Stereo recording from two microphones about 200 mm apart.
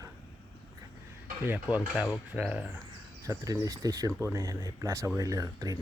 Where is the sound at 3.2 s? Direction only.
15° right (ahead or behind).